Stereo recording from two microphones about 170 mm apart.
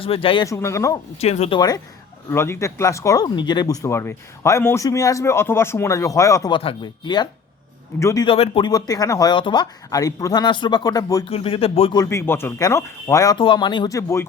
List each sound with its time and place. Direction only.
0.0 s speech: 30° left (ahead or behind)
0.4 s speech: 20° left (ahead or behind)
1.2 s speech: 40° left (ahead or behind)
1.5 s speech: 25° left (ahead or behind)
8.3 s speech: 30° left (ahead or behind)
11.3 s speech: 35° left (ahead or behind)
11.9 s speech: 15° left (ahead or behind)